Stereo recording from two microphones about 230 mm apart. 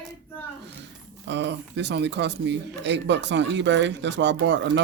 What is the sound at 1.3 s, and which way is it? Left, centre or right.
Speech, right.